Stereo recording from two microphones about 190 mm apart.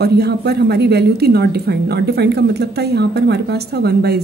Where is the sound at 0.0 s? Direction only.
60° right (ahead or behind).